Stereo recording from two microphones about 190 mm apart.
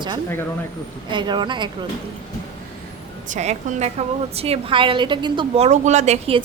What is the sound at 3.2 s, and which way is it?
A woman's voice, 40° right (ahead or behind).